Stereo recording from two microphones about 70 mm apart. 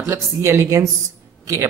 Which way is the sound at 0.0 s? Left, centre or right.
Right.